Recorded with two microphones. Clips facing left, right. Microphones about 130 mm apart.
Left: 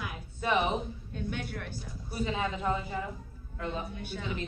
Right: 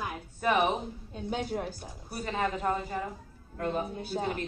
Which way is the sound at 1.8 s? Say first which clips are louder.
Left 4 dB; 50° right (ahead or behind).